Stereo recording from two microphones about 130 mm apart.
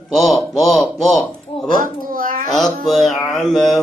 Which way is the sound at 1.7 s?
90° right.